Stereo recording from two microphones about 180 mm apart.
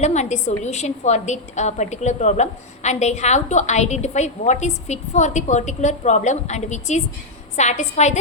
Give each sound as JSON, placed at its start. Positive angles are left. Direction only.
{"t": 0.0, "sound": "a woman's voice", "side_deg": 40}